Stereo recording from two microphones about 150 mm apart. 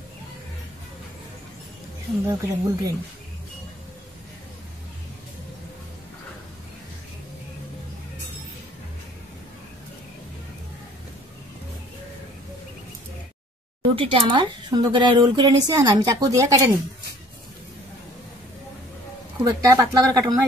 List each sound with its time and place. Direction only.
2.2 s a woman's voice: 20° right (ahead or behind)
13.9 s a woman's voice: 35° right (ahead or behind)
19.4 s a woman's voice: 20° right (ahead or behind)